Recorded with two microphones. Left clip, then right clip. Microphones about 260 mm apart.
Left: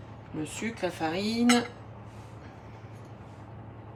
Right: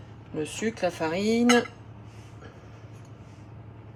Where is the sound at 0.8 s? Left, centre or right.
Right.